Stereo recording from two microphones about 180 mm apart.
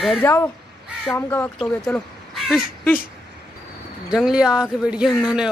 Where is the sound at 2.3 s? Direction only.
Centre (ahead or behind).